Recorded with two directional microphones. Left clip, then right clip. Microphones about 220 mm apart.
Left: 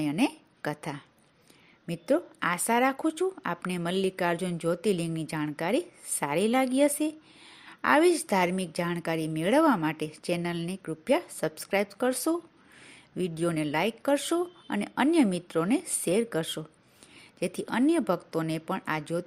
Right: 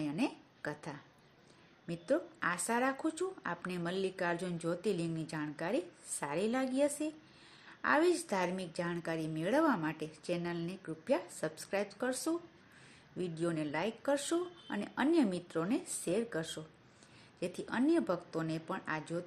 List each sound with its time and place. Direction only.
0.0 s a woman's voice: 35° left (ahead or behind)